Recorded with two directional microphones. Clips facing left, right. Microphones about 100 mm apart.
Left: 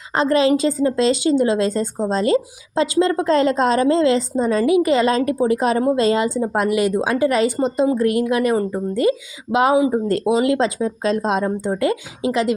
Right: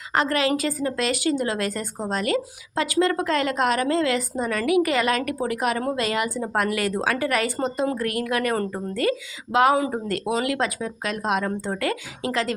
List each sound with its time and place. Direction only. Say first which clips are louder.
0.1 s a woman's voice: left 6 dB; 25° left (ahead or behind)